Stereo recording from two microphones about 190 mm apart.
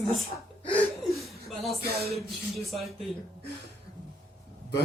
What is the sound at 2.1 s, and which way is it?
Speech, centre (ahead or behind).